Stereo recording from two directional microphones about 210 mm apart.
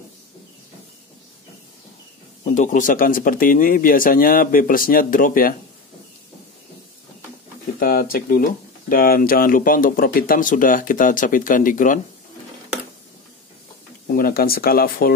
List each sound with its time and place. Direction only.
2.4 s speech: 35° left (ahead or behind)
7.8 s speech: 45° left (ahead or behind)
14.1 s speech: 45° left (ahead or behind)